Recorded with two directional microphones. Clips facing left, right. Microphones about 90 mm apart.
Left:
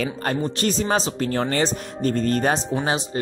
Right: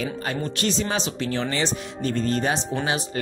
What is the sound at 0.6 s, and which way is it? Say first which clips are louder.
Speech: left 2 dB; 40° left (ahead or behind).